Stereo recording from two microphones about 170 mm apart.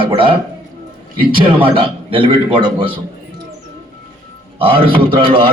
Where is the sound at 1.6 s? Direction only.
30° right (ahead or behind).